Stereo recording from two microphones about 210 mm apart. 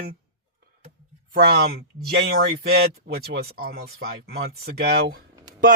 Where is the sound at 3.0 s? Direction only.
50° right (ahead or behind).